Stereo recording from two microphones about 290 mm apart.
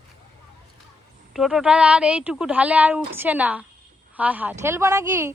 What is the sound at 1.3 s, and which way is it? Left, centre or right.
Speech, centre.